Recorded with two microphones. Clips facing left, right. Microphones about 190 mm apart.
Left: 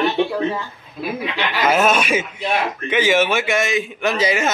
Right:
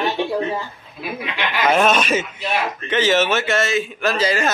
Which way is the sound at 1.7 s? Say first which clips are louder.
Even; 5° left (ahead or behind).